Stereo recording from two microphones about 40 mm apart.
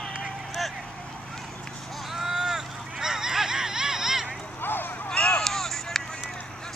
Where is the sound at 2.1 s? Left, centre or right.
Centre.